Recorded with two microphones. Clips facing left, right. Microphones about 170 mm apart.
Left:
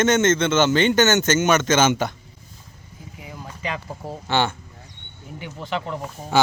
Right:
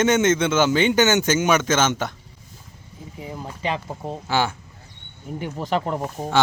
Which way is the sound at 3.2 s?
30° right (ahead or behind).